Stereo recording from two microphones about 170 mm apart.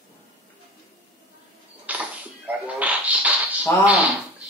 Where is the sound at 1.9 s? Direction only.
10° right (ahead or behind).